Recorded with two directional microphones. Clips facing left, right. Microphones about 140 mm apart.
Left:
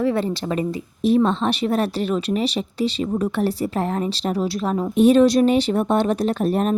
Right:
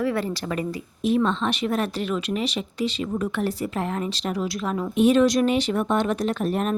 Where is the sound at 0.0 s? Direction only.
25° left (ahead or behind).